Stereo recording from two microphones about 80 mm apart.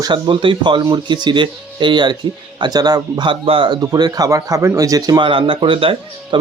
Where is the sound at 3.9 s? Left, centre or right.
Right.